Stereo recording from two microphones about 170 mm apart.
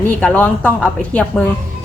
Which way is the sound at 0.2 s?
10° left (ahead or behind).